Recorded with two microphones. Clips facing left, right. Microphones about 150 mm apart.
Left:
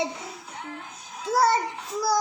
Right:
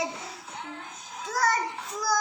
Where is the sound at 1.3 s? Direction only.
30° left (ahead or behind).